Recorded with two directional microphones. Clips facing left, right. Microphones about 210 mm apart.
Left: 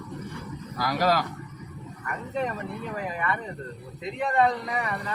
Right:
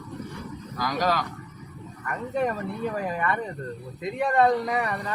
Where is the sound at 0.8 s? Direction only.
10° left (ahead or behind).